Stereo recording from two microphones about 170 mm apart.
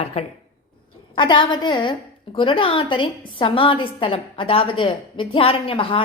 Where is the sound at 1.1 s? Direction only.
30° left (ahead or behind).